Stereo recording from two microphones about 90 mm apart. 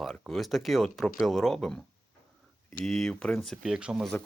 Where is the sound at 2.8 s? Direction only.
Centre (ahead or behind).